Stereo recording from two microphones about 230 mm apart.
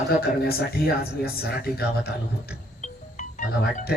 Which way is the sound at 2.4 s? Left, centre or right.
Left.